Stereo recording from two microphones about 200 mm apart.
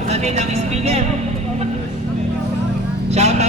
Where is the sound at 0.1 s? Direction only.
35° right (ahead or behind).